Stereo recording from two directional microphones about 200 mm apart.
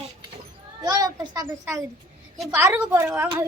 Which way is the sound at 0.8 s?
20° right (ahead or behind).